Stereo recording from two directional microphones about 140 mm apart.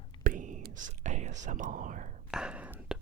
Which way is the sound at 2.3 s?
5° right (ahead or behind).